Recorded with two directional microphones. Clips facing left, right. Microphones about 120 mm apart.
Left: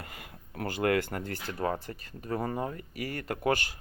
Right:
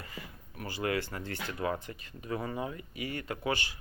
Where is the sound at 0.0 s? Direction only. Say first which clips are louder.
Even; 60° left (ahead or behind).